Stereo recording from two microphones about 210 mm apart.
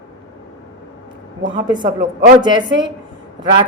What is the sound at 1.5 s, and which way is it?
A woman's voice, 20° right (ahead or behind).